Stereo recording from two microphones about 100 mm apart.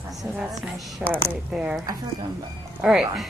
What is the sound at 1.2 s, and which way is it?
Speech, 10° right (ahead or behind).